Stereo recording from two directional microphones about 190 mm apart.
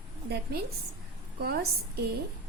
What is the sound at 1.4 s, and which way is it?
Speech, 55° right (ahead or behind).